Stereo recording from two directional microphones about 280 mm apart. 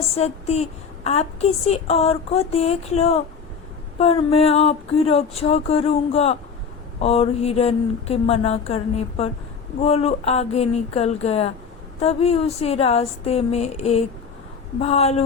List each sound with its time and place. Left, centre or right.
0.2 s a woman's voice: left